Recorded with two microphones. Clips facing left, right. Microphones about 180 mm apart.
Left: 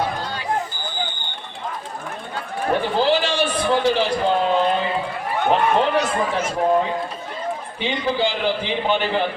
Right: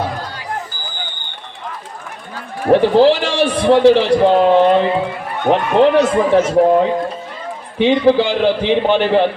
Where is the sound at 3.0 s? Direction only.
90° right; by 4.8 s 70° right (ahead or behind).